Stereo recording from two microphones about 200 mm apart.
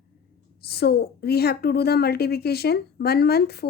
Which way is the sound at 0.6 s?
50° left (ahead or behind).